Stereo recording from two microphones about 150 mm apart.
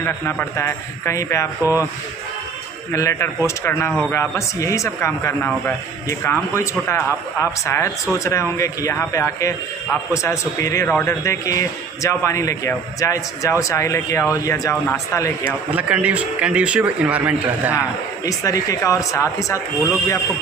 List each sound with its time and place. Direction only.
0.0 s a man's voice: 15° left (ahead or behind)
1.6 s a man's voice: 15° right (ahead or behind)
2.9 s a man's voice: 20° left (ahead or behind)
15.7 s a man's voice: 10° right (ahead or behind)
18.3 s a man's voice: 25° left (ahead or behind)